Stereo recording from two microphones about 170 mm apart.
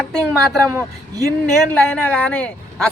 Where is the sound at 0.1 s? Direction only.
5° left (ahead or behind).